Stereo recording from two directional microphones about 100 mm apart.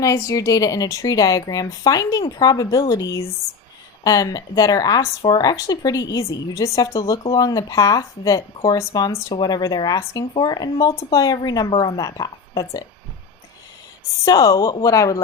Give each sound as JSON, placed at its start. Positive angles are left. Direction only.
{"t": 0.0, "sound": "speech", "side_deg": 35}
{"t": 14.3, "sound": "speech", "side_deg": 35}